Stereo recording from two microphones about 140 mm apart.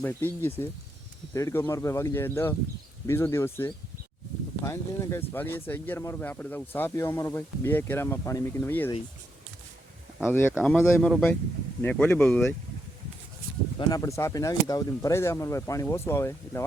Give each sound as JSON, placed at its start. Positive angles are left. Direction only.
{"t": 0.0, "sound": "speech", "side_deg": 15}
{"t": 10.2, "sound": "speech", "side_deg": 15}
{"t": 13.7, "sound": "speech", "side_deg": 25}